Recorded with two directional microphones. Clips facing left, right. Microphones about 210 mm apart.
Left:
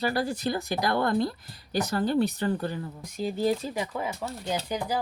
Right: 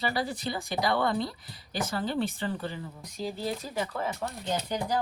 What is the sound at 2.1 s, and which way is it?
Speech, 40° left (ahead or behind).